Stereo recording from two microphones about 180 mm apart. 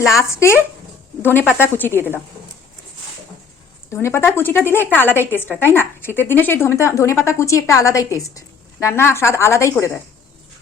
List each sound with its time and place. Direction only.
0.2 s speech: 15° left (ahead or behind)
2.0 s speech: 10° right (ahead or behind)
3.9 s speech: 15° left (ahead or behind)